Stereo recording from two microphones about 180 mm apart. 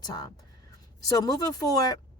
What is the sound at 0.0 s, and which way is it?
Speech, 20° left (ahead or behind).